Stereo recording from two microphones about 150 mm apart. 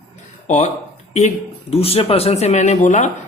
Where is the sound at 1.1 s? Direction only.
50° left (ahead or behind).